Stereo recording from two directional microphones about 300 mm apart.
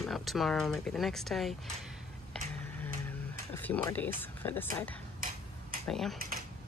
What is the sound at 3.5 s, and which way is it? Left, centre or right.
Speech, centre.